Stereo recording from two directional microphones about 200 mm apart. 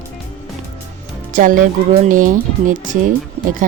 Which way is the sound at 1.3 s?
40° right (ahead or behind).